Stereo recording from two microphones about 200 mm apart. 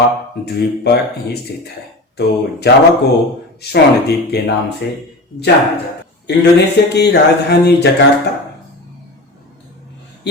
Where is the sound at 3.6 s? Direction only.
55° left (ahead or behind).